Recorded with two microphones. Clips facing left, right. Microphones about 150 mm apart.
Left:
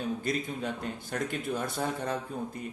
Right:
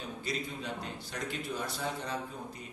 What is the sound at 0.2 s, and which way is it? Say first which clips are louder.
A man's voice: left 5 dB; 50° left (ahead or behind).